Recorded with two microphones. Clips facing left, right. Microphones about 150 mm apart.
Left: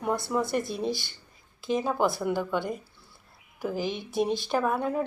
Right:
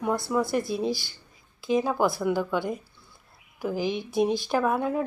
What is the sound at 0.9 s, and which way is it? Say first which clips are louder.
Speech: right 2 dB; 55° left (ahead or behind).